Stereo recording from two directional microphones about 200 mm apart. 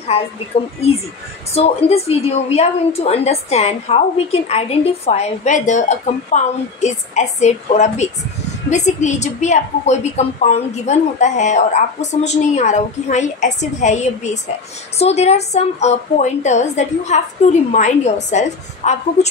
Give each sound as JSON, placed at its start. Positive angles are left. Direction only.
{"t": 0.5, "sound": "a woman's voice", "side_deg": 30}